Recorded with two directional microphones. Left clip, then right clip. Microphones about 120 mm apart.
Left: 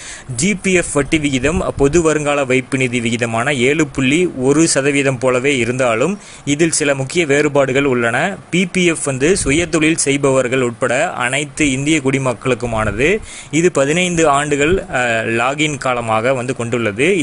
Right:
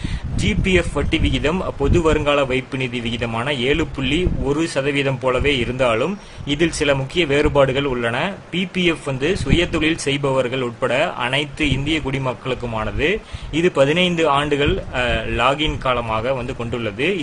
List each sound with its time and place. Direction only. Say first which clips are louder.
0.4 s speech: left 3 dB; 40° left (ahead or behind)